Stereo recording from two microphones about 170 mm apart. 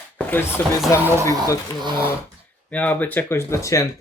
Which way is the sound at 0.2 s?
10° left (ahead or behind).